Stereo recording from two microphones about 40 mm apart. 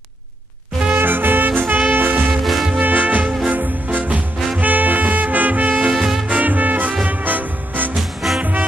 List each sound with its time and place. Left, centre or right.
0.9 s music: right
1.9 s swing music: right
2.4 s music: centre
2.8 s music: right
5.9 s music: centre
6.2 s music: right
7.9 s swing music: centre
8.4 s music: right